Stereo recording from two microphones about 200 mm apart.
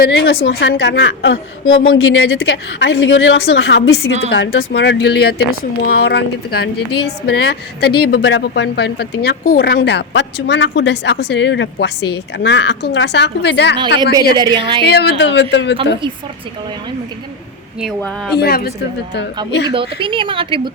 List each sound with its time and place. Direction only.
0.0 s a woman's voice: 60° left (ahead or behind)
14.0 s a woman's voice: 20° right (ahead or behind)
14.8 s a woman's voice: 55° left (ahead or behind)
17.7 s speech: centre (ahead or behind)
18.3 s a woman's voice: 50° left (ahead or behind)
19.7 s a woman's voice: 25° right (ahead or behind)